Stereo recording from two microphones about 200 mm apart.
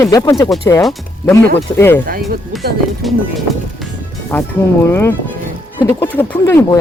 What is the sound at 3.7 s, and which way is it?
Speech, 5° left (ahead or behind).